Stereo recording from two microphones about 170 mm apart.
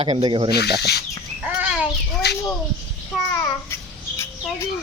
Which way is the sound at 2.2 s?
75° left (ahead or behind).